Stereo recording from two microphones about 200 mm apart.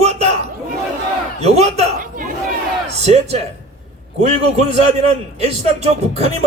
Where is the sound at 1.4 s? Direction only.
30° right (ahead or behind).